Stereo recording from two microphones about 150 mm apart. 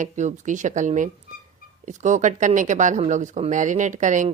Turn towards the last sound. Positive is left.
turn(degrees=-55)  # may be behind; listen again after turning